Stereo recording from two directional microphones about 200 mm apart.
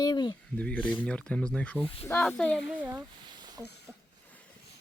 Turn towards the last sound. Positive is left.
turn(degrees=5)  # may be behind; listen again after turning